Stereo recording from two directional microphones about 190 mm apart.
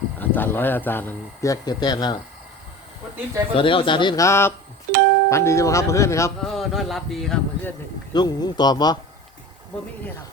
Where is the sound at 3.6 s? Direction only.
25° left (ahead or behind).